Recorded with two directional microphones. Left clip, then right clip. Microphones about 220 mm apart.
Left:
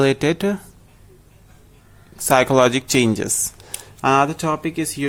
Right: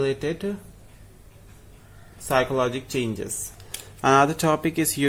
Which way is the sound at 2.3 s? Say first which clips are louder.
Left 8 dB; 35° left (ahead or behind).